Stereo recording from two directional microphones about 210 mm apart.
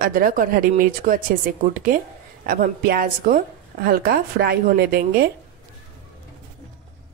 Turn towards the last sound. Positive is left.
turn(degrees=-45)  # may be behind; listen again after turning